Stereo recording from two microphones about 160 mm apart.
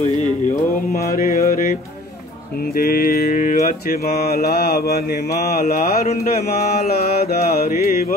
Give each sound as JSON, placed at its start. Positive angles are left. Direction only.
{"t": 0.9, "sound": "mantra", "side_deg": 65}
{"t": 2.7, "sound": "mantra", "side_deg": 65}